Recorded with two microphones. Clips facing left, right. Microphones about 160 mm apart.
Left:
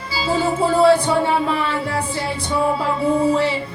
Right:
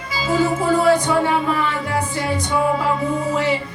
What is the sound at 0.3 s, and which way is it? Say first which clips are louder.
Music: right 1 dB; 30° left (ahead or behind).